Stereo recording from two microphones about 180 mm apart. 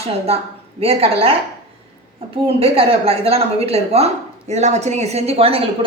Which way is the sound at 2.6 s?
30° right (ahead or behind).